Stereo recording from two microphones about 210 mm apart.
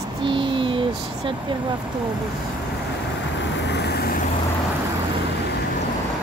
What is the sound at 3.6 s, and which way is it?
Vehicle, 55° left (ahead or behind).